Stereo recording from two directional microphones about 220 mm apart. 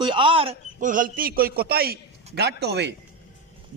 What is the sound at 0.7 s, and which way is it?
A man's voice, 35° right (ahead or behind).